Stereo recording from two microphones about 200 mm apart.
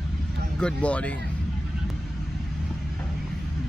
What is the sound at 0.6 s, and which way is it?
Speech, 5° left (ahead or behind).